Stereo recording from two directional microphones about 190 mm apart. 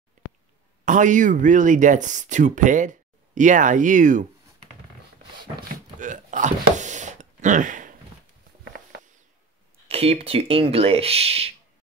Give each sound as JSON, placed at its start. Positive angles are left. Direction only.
{"t": 0.8, "sound": "speech", "side_deg": -40}
{"t": 5.9, "sound": "a sound", "side_deg": -40}
{"t": 9.8, "sound": "speech", "side_deg": -30}